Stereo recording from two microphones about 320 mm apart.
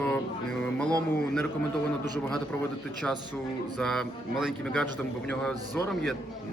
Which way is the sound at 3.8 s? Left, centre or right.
Centre.